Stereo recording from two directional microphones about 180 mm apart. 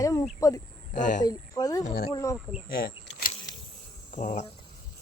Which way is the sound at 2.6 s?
55° left (ahead or behind).